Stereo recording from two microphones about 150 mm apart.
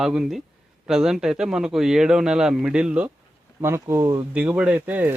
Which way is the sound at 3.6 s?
15° right (ahead or behind).